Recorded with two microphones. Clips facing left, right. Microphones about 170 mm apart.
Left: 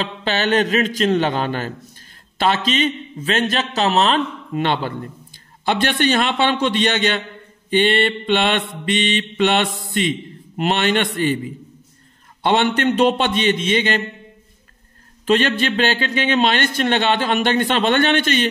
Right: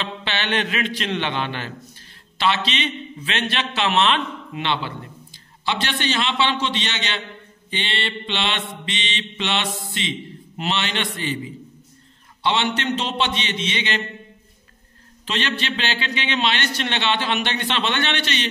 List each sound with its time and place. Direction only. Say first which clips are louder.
0.0 s a man's voice: left 6 dB; 40° left (ahead or behind)
15.2 s a man's voice: left 9 dB; 50° left (ahead or behind)